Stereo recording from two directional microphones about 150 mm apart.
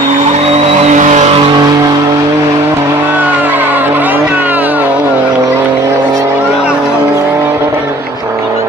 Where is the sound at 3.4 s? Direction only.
10° right (ahead or behind).